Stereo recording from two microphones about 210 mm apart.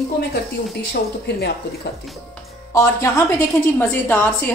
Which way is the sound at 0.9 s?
50° left (ahead or behind).